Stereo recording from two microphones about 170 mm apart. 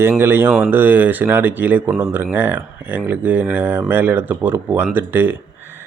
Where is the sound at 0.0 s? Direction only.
15° right (ahead or behind).